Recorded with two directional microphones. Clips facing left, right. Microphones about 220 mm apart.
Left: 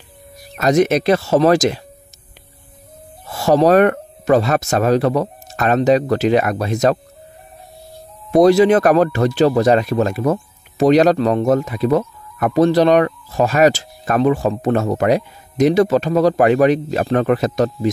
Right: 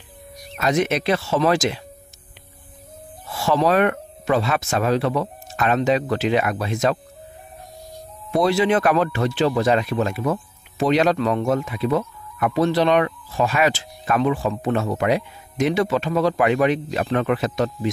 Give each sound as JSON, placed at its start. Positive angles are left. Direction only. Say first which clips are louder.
{"t": 0.6, "sound": "speech", "louder": "left 6 dB", "side_deg": 40}
{"t": 3.3, "sound": "speech", "louder": "left 6 dB", "side_deg": 40}
{"t": 8.3, "sound": "speech", "louder": "left 8 dB", "side_deg": 45}